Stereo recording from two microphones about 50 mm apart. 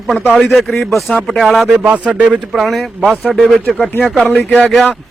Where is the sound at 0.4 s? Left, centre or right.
Centre.